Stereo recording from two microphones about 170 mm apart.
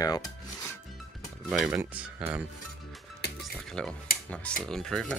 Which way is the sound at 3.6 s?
5° left (ahead or behind).